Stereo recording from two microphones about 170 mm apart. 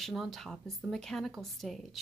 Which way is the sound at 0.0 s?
Centre (ahead or behind).